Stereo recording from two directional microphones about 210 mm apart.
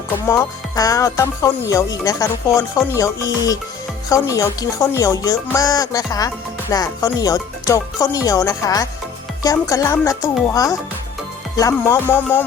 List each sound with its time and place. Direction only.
0.3 s speech: 15° left (ahead or behind)